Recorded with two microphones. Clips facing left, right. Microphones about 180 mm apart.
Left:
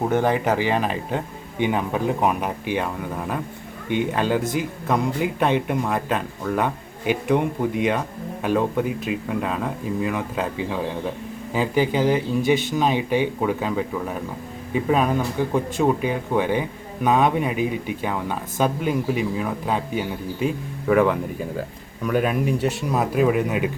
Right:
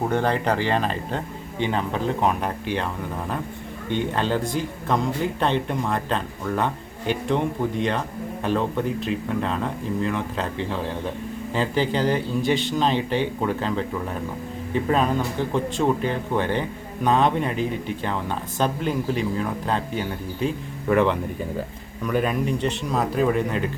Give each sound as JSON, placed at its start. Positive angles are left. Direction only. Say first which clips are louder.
{"t": 0.1, "sound": "speech", "louder": "left 2 dB", "side_deg": 15}